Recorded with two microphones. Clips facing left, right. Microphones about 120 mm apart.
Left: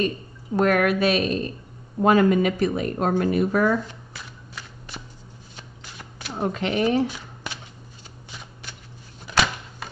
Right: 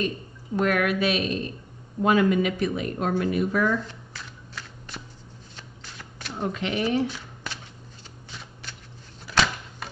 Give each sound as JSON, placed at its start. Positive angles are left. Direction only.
{"t": 0.6, "sound": "speech", "side_deg": 45}
{"t": 3.8, "sound": "shuffling cards", "side_deg": 10}
{"t": 6.3, "sound": "speech", "side_deg": 40}
{"t": 9.3, "sound": "typewriter", "side_deg": 10}